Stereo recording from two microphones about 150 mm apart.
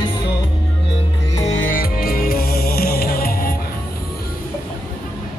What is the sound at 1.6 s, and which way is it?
Music, 70° left (ahead or behind).